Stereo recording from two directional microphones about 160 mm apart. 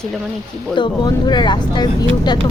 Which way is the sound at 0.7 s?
25° left (ahead or behind).